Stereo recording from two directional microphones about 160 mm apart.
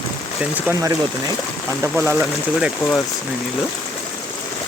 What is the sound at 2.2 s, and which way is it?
Speech, 5° right (ahead or behind).